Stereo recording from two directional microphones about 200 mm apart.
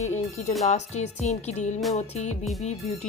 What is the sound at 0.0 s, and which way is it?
Speech, 35° left (ahead or behind).